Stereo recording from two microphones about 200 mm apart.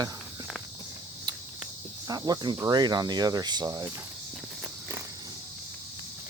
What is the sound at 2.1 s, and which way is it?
Speech, 20° right (ahead or behind).